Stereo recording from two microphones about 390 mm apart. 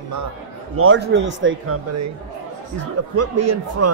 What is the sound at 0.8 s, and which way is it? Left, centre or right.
A man's voice, right.